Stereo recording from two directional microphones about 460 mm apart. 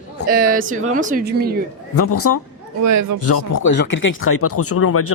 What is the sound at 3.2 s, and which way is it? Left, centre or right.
Speech, left.